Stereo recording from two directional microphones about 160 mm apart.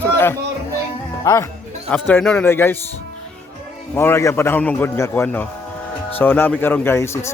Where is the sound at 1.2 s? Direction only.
20° left (ahead or behind).